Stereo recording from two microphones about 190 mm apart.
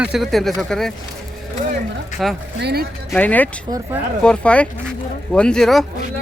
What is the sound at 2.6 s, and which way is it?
Speech, 60° right (ahead or behind).